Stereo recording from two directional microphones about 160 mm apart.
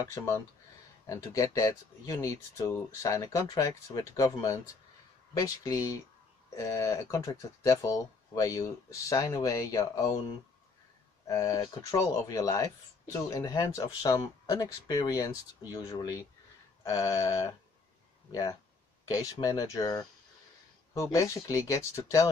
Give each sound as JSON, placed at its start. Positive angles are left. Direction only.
{"t": 1.0, "sound": "speech", "side_deg": 20}
{"t": 11.2, "sound": "speech", "side_deg": 20}